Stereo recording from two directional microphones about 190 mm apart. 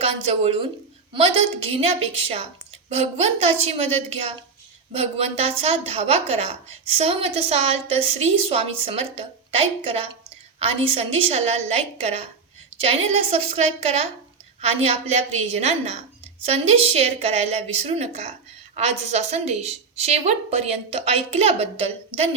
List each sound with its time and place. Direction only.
0.0 s a woman's voice: 30° right (ahead or behind)